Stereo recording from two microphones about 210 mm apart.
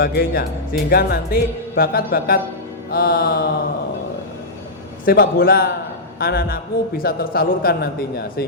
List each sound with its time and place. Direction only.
0.0 s speech: 50° left (ahead or behind)
5.0 s speech: 45° left (ahead or behind)